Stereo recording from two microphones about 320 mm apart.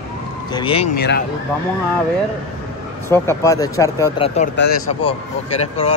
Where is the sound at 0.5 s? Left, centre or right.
Centre.